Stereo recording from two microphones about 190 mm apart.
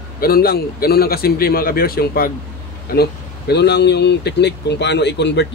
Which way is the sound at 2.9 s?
55° left (ahead or behind).